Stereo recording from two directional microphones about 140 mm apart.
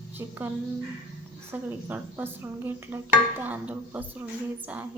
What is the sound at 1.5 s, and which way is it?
Speech, 15° right (ahead or behind).